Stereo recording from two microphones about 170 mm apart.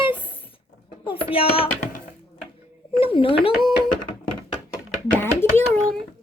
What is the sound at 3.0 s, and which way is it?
Speech, 30° left (ahead or behind).